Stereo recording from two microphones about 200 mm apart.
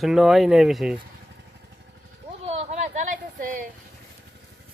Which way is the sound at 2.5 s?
35° right (ahead or behind).